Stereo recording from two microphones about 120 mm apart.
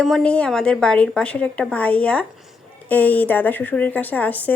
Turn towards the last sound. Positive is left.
turn(degrees=15)  # may be behind; listen again after turning